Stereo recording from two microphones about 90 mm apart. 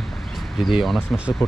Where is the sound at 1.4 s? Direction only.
30° left (ahead or behind).